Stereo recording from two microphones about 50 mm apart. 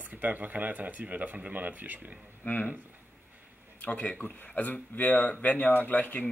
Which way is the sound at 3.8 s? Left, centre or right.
Left.